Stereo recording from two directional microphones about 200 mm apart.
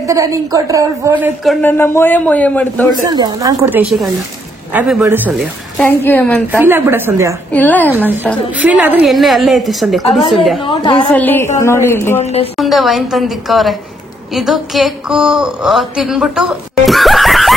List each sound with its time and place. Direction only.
0.0 s a woman's voice: 15° right (ahead or behind); by 2.9 s 10° left (ahead or behind)
2.9 s speech: 20° right (ahead or behind)
3.6 s a woman's voice: 5° right (ahead or behind)
5.8 s a woman's voice: 10° left (ahead or behind)
6.6 s a woman's voice: 10° right (ahead or behind)
7.5 s a woman's voice: 10° left (ahead or behind)
7.9 s a woman's voice: 10° right (ahead or behind)
10.7 s a woman's voice: 25° left (ahead or behind)
11.1 s a woman's voice: 10° left (ahead or behind)
12.2 s a woman's voice: 30° left (ahead or behind)
12.5 s a woman's voice: centre (ahead or behind)